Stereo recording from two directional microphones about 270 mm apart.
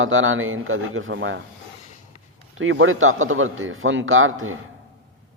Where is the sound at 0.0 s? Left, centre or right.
Right.